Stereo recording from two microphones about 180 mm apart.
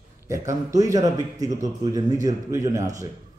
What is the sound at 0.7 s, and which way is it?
A man's voice, 20° right (ahead or behind).